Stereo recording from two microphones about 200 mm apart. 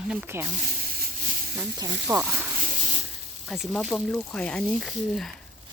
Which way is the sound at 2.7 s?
30° right (ahead or behind).